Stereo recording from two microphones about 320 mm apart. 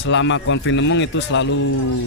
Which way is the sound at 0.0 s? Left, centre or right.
Left.